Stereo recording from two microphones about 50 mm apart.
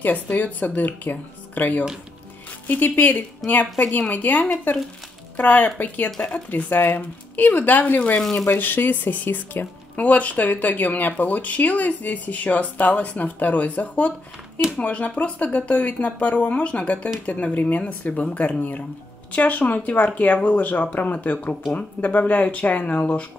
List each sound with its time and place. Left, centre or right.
0.0 s speech: left
6.0 s speech: centre
6.5 s speech: left
8.2 s speech: centre
8.5 s speech: left
9.9 s speech: left